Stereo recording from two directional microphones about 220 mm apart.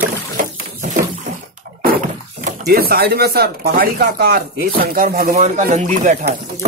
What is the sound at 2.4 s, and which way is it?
A man's voice, 45° right (ahead or behind).